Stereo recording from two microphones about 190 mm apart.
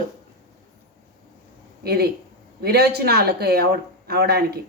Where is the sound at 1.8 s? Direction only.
55° right (ahead or behind).